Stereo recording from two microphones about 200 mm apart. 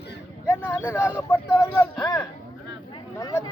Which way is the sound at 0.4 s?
10° left (ahead or behind).